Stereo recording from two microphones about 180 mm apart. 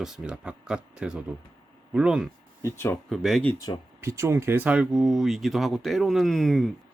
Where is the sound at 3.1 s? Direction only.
Centre (ahead or behind).